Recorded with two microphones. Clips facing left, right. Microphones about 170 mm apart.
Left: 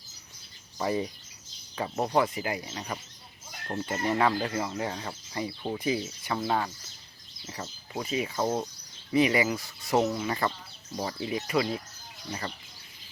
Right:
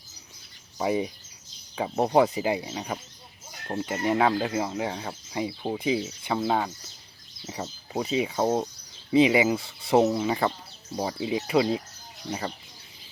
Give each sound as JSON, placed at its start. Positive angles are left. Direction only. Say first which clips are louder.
{"t": 0.8, "sound": "speech", "louder": "right 3 dB", "side_deg": -10}
{"t": 2.0, "sound": "speech", "louder": "right 6 dB", "side_deg": -25}
{"t": 2.6, "sound": "speech", "louder": "right 4 dB", "side_deg": -10}